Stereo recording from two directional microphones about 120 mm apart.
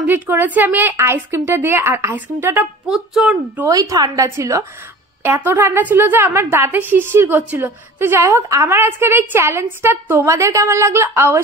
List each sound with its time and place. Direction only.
0.0 s a woman's voice: 15° right (ahead or behind)
2.9 s speech: 5° right (ahead or behind)
3.6 s a woman's voice: 30° right (ahead or behind)